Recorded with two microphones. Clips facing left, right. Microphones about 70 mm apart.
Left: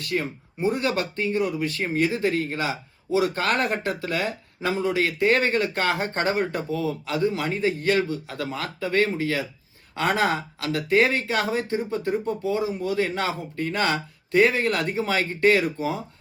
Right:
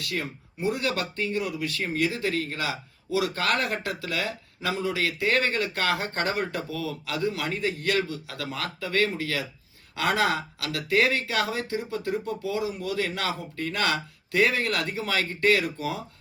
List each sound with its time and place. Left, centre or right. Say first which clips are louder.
0.1 s speech: left 6 dB; left